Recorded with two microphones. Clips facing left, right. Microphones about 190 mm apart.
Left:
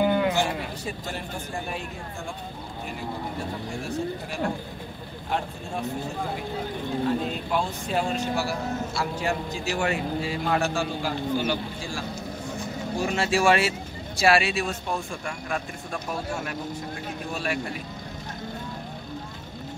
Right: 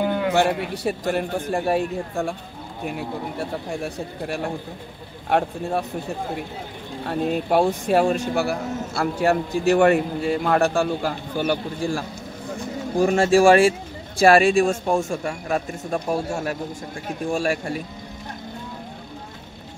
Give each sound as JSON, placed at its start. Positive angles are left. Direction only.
{"t": 0.0, "sound": "a sound", "side_deg": 5}
{"t": 0.3, "sound": "a man's voice", "side_deg": -65}
{"t": 7.1, "sound": "a man's voice", "side_deg": -60}
{"t": 13.0, "sound": "speech", "side_deg": -50}